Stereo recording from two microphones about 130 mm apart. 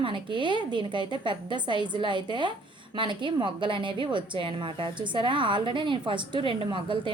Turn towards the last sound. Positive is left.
turn(degrees=-40)  # may be behind; listen again after turning